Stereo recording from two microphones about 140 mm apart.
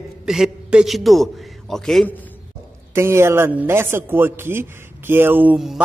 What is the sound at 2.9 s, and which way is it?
Speech, 20° right (ahead or behind).